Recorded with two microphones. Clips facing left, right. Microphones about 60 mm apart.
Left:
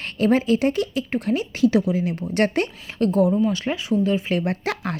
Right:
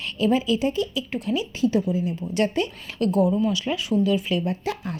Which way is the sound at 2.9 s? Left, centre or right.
Left.